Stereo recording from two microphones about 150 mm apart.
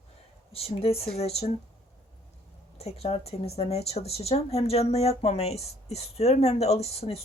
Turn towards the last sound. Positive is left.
turn(degrees=45)  # may be behind; listen again after turning